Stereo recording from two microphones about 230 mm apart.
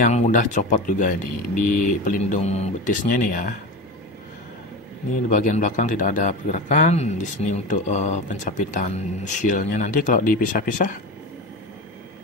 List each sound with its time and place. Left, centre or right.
0.0 s a man's voice: left
5.4 s a man's voice: left